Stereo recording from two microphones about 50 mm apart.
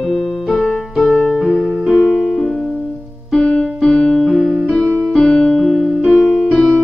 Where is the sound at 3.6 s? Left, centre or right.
Centre.